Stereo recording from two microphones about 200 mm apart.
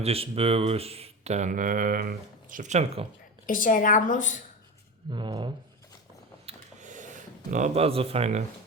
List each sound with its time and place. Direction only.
0.0 s speech: 30° right (ahead or behind)
3.4 s a woman's voice: 40° left (ahead or behind)
5.1 s speech: 25° right (ahead or behind)
6.4 s a sound: 35° right (ahead or behind)